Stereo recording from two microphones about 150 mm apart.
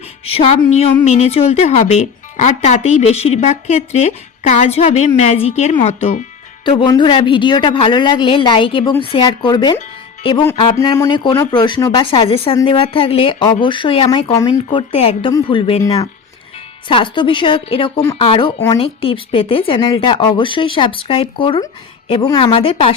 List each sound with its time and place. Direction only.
0.3 s a woman's voice: 40° left (ahead or behind)
6.7 s speech: 30° left (ahead or behind)
10.8 s a woman's voice: 20° left (ahead or behind)
11.1 s speech: 30° left (ahead or behind)
14.7 s speech: 35° left (ahead or behind)
15.8 s a woman's voice: 25° left (ahead or behind)
16.9 s a woman's voice: 35° left (ahead or behind)
22.5 s speech: 40° left (ahead or behind)